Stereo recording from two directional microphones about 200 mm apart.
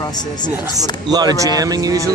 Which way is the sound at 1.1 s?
20° right (ahead or behind).